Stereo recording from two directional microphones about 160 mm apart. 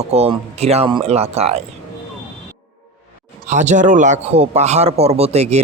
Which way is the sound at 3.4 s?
50° right (ahead or behind).